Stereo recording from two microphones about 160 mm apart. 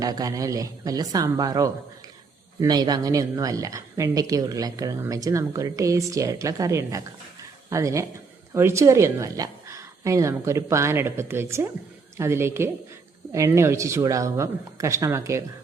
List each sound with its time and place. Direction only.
0.0 s a woman's voice: 20° right (ahead or behind)